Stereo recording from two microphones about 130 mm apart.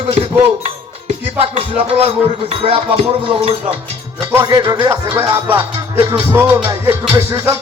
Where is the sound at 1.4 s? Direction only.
45° right (ahead or behind).